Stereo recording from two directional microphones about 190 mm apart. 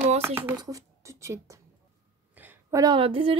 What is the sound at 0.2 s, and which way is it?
A woman's voice, 10° right (ahead or behind).